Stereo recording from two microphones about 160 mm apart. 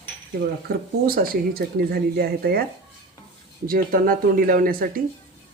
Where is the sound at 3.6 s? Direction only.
65° right (ahead or behind).